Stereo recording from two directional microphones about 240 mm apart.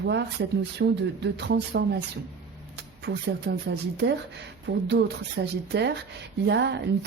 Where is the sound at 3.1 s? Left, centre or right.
Right.